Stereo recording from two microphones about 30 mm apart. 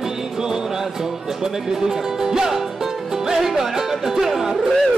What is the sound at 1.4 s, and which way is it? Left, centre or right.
Music, centre.